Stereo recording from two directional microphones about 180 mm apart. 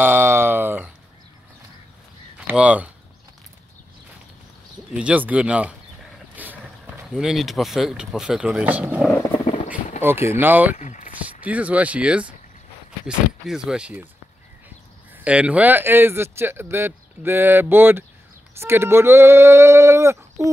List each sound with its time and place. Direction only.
0.0 s a sound: 15° right (ahead or behind)
2.4 s speech: 5° right (ahead or behind)
4.9 s speech: 5° right (ahead or behind)
6.3 s vehicle: 10° right (ahead or behind)
7.1 s speech: centre (ahead or behind)
10.8 s a sound: 45° left (ahead or behind)
11.4 s speech: 10° right (ahead or behind)
15.2 s speech: 5° right (ahead or behind)